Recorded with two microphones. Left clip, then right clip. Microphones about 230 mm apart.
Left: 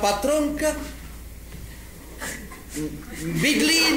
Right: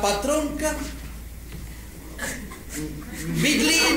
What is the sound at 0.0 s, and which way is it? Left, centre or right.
Speech, left.